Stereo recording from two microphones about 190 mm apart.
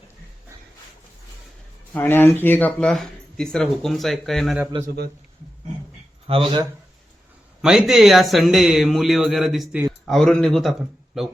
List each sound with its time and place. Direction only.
1.9 s speech: 10° left (ahead or behind)
6.2 s speech: 30° right (ahead or behind)
7.6 s speech: centre (ahead or behind)